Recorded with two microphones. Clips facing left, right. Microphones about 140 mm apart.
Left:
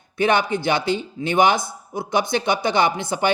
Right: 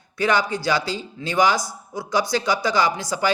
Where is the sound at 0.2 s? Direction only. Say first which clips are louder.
Left 2 dB; 25° left (ahead or behind).